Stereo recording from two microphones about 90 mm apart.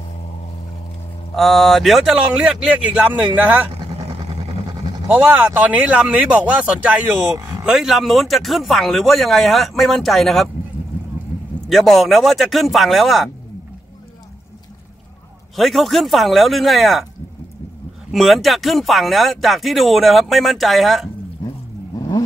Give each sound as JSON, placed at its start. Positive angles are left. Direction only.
{"t": 1.3, "sound": "speech", "side_deg": 0}
{"t": 3.3, "sound": "speech", "side_deg": -20}
{"t": 5.3, "sound": "speech", "side_deg": -20}
{"t": 7.3, "sound": "a sound", "side_deg": -40}
{"t": 7.6, "sound": "speech", "side_deg": -5}
{"t": 11.7, "sound": "speech", "side_deg": 0}
{"t": 15.5, "sound": "speech", "side_deg": 0}
{"t": 18.1, "sound": "speech", "side_deg": 0}
{"t": 21.9, "sound": "vehicle", "side_deg": 45}